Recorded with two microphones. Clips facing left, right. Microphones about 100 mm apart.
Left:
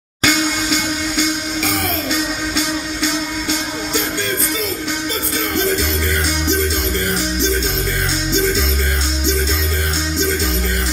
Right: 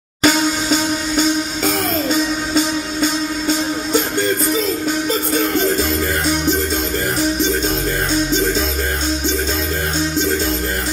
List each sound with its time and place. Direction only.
0.2 s music: 40° right (ahead or behind)
5.3 s music: 45° right (ahead or behind)